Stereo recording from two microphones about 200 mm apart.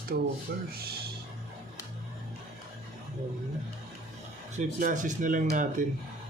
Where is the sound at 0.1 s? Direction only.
50° right (ahead or behind).